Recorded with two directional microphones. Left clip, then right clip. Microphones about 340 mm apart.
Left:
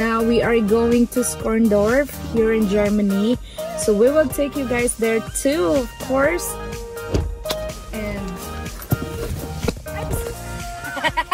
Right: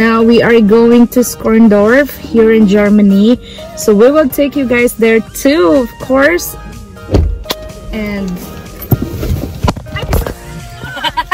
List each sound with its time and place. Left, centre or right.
0.0 s speech: centre
7.1 s music: centre
11.0 s a sound: centre